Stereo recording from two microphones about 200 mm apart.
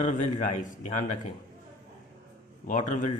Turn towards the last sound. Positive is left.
turn(degrees=40)  # may be behind; listen again after turning